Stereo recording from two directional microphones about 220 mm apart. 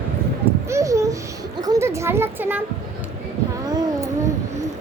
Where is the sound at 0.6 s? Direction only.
15° right (ahead or behind).